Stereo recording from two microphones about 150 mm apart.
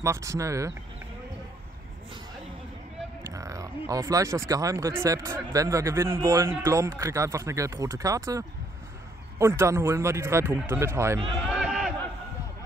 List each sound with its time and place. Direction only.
0.0 s speech: 20° right (ahead or behind)
3.3 s speech: 20° right (ahead or behind)
11.4 s a sound: 5° right (ahead or behind)